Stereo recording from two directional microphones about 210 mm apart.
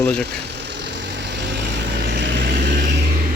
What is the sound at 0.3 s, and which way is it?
Vehicle, 55° right (ahead or behind).